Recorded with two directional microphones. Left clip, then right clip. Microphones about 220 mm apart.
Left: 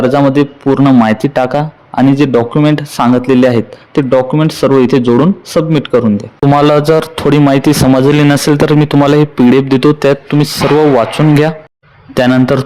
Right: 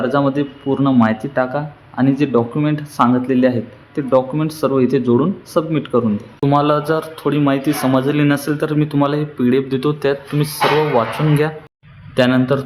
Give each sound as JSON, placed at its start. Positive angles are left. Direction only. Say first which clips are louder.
{"t": 0.1, "sound": "speech", "louder": "left 8 dB", "side_deg": 35}